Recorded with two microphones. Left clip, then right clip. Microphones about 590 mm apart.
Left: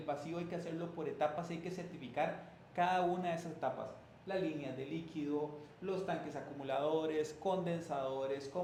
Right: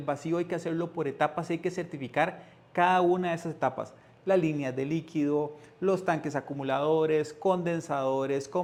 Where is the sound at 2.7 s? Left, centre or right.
Right.